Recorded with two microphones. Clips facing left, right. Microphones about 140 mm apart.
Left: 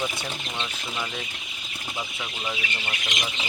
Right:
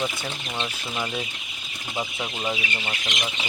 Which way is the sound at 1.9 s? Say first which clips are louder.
Right 5 dB; 25° right (ahead or behind).